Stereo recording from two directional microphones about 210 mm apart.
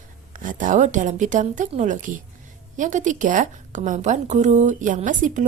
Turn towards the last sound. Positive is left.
turn(degrees=-35)  # may be behind; listen again after turning